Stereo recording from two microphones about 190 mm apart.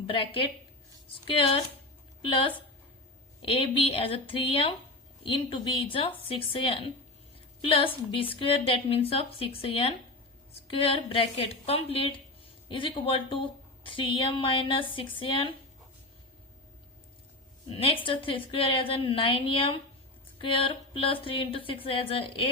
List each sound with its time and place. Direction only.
0.1 s a woman's voice: 30° left (ahead or behind)
17.7 s a woman's voice: 30° left (ahead or behind)